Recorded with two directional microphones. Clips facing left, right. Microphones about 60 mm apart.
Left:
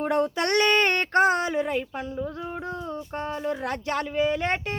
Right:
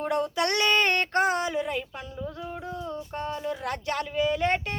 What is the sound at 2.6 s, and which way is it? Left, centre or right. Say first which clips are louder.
Speech: left 2 dB; left.